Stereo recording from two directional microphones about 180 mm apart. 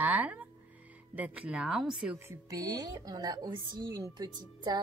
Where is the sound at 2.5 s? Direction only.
20° right (ahead or behind).